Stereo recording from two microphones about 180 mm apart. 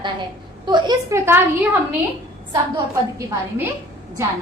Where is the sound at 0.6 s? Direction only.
25° right (ahead or behind).